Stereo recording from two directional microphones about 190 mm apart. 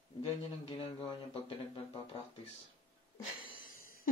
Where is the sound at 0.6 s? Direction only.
30° left (ahead or behind).